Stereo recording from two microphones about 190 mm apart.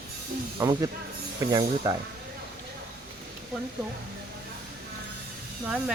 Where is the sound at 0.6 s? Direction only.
20° right (ahead or behind).